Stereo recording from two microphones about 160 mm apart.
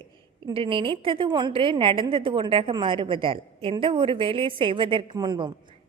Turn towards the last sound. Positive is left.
turn(degrees=-25)  # may be behind; listen again after turning